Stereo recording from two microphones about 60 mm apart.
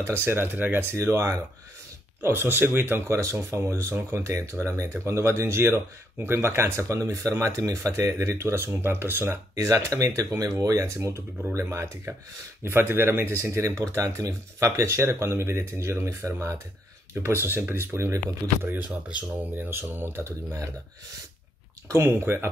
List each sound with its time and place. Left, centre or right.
0.2 s speech: right
0.9 s speech: right
2.2 s speech: right
3.2 s speech: right
7.5 s speech: right
7.9 s speech: right
9.6 s speech: right
12.6 s speech: right
13.4 s speech: right
13.9 s speech: right
17.1 s speech: right
17.9 s speech: right
18.6 s speech: right
22.0 s speech: right